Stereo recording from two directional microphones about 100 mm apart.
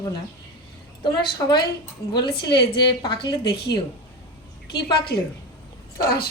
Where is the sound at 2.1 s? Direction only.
50° left (ahead or behind).